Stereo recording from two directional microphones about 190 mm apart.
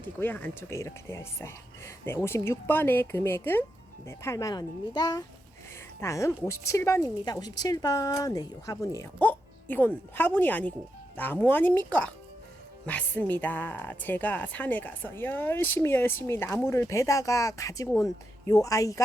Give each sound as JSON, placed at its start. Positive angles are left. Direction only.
{"t": 0.2, "sound": "a woman's voice", "side_deg": 10}